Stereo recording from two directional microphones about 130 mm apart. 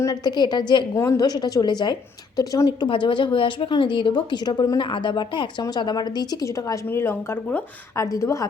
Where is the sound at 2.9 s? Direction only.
40° left (ahead or behind).